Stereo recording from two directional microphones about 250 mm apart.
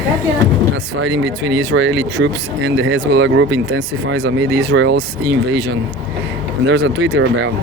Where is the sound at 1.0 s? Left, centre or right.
Right.